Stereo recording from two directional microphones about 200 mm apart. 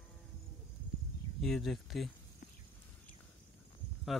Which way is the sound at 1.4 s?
Centre (ahead or behind).